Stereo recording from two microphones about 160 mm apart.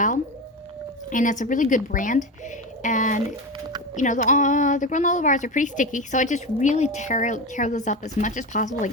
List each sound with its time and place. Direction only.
1.1 s a woman's voice: 55° left (ahead or behind)